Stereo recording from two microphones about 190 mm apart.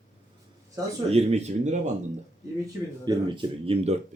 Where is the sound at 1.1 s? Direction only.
35° right (ahead or behind).